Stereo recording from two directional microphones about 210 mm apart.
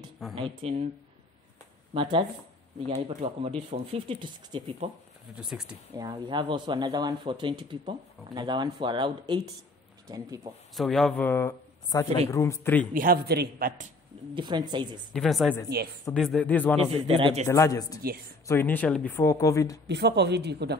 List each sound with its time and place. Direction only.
0.4 s speech: 30° right (ahead or behind)
2.0 s speech: 25° right (ahead or behind)
5.3 s speech: 5° right (ahead or behind)
5.9 s speech: 20° right (ahead or behind)
10.8 s speech: centre (ahead or behind)
12.9 s speech: 45° right (ahead or behind)
14.3 s speech: 20° right (ahead or behind)
15.1 s speech: centre (ahead or behind)
17.1 s speech: 30° right (ahead or behind)
17.5 s speech: 15° left (ahead or behind)
19.9 s speech: 55° right (ahead or behind)